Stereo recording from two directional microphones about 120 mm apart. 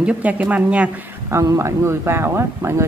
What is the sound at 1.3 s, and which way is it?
Speech, 25° right (ahead or behind).